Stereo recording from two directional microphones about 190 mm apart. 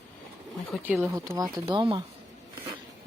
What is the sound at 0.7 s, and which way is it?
Speech, 5° right (ahead or behind).